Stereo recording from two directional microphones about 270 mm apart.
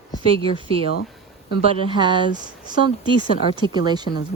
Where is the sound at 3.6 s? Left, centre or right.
Centre.